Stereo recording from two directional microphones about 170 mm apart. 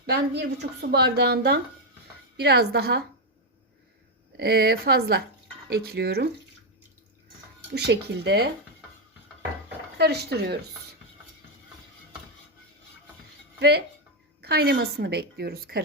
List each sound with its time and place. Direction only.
0.0 s a woman's voice: 70° right (ahead or behind)
4.4 s a woman's voice: 70° right (ahead or behind)
7.7 s speech: 80° right
10.0 s a woman's voice: 70° right (ahead or behind)
13.6 s a woman's voice: 70° right (ahead or behind)